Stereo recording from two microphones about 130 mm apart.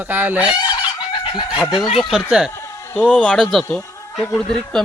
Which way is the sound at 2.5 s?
20° left (ahead or behind).